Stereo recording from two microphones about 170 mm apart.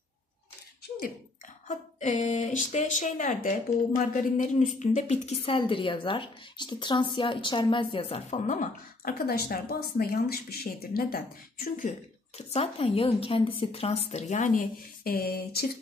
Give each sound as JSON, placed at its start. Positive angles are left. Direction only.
{"t": 1.7, "sound": "a woman's voice", "side_deg": 45}
{"t": 9.2, "sound": "speech", "side_deg": 65}
{"t": 12.5, "sound": "a woman's voice", "side_deg": 35}